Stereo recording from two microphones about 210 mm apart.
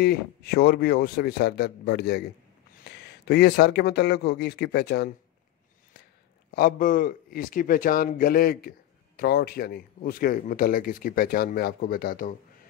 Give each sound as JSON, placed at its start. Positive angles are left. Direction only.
{"t": 0.0, "sound": "a man's voice", "side_deg": 50}
{"t": 6.5, "sound": "a man's voice", "side_deg": 45}